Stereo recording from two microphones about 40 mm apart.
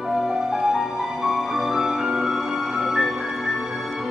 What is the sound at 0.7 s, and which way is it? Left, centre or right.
Music, centre.